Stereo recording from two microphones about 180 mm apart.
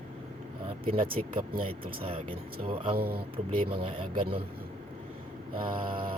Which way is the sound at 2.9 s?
60° right (ahead or behind).